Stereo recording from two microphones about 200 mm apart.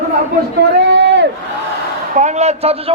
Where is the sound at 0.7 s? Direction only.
60° right (ahead or behind).